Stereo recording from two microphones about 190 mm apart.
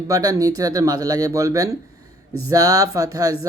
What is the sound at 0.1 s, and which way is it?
Speech, 20° right (ahead or behind).